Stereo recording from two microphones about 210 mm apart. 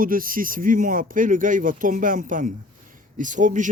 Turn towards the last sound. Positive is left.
turn(degrees=-35)  # may be behind; listen again after turning